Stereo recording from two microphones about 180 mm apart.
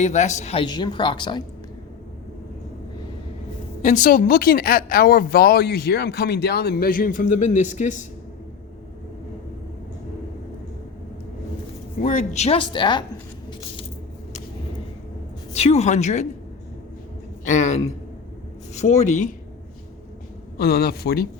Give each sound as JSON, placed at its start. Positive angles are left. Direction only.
{"t": 0.0, "sound": "speech", "side_deg": 40}
{"t": 0.6, "sound": "speech", "side_deg": 25}
{"t": 3.8, "sound": "speech", "side_deg": 45}
{"t": 11.9, "sound": "speech", "side_deg": 45}
{"t": 15.5, "sound": "speech", "side_deg": 35}
{"t": 17.4, "sound": "a woman's voice", "side_deg": 40}
{"t": 20.6, "sound": "speech", "side_deg": 60}